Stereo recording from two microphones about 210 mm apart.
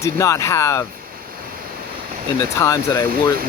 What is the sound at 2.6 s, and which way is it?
Speech, 15° left (ahead or behind).